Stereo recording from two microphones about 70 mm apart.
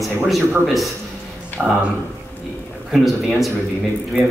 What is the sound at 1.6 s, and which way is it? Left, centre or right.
Speech, centre.